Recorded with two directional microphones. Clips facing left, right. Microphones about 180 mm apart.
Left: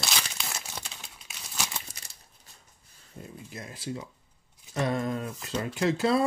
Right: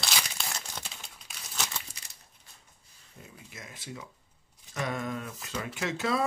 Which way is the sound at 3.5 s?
35° left (ahead or behind).